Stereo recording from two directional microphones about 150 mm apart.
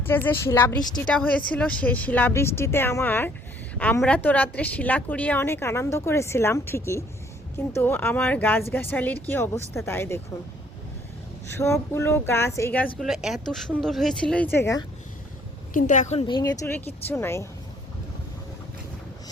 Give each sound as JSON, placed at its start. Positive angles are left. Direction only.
{"t": 0.0, "sound": "a woman's voice", "side_deg": 15}
{"t": 11.5, "sound": "a woman's voice", "side_deg": 20}
{"t": 13.0, "sound": "speech", "side_deg": 0}
{"t": 15.7, "sound": "a woman's voice", "side_deg": 55}
{"t": 16.2, "sound": "speech", "side_deg": 30}
{"t": 16.6, "sound": "a woman's voice", "side_deg": 15}